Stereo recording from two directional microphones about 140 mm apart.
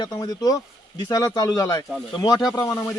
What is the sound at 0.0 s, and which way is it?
Speech, 25° left (ahead or behind).